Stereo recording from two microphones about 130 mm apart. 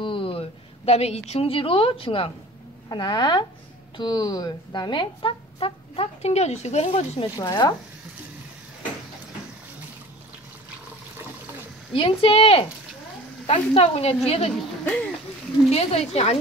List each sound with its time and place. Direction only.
0.0 s a woman's voice: 40° left (ahead or behind)
7.3 s a woman's voice: 30° left (ahead or behind)
11.9 s a woman's voice: 45° left (ahead or behind)
15.7 s a woman's voice: 50° left (ahead or behind)